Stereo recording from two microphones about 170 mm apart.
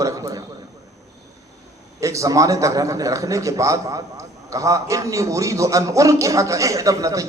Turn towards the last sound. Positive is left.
turn(degrees=-20)  # may be behind; listen again after turning